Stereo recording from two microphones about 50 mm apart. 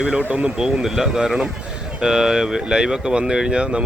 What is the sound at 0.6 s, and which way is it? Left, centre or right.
Speech, centre.